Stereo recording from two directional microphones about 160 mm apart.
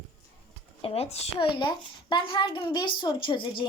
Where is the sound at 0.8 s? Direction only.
35° left (ahead or behind).